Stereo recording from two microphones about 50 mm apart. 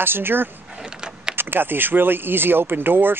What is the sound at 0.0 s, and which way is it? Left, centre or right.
Speech, right.